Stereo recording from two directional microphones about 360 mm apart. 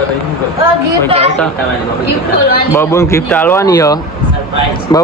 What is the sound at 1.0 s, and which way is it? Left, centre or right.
Speech, centre.